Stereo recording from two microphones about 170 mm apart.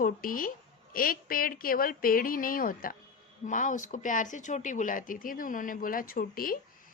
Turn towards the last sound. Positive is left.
turn(degrees=55)  # may be behind; listen again after turning